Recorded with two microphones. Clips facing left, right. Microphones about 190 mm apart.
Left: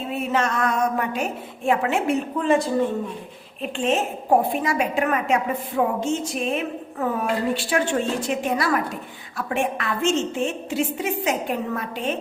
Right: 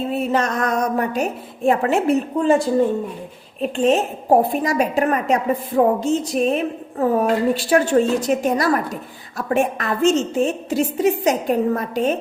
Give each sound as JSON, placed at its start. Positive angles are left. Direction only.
{"t": 0.1, "sound": "a woman's voice", "side_deg": -35}
{"t": 3.6, "sound": "a woman's voice", "side_deg": -40}